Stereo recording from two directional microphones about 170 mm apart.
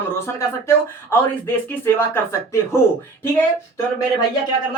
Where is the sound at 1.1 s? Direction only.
10° left (ahead or behind).